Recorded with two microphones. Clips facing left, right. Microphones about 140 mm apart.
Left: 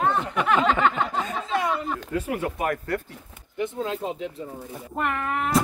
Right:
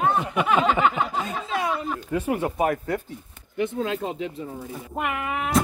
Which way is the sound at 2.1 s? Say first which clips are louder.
Right 4 dB; 25° right (ahead or behind).